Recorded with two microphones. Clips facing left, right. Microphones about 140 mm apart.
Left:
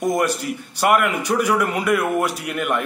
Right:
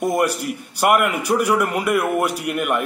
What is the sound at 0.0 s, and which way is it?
A man's voice, 10° right (ahead or behind).